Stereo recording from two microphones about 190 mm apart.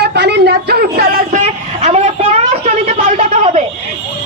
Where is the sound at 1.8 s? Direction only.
35° right (ahead or behind).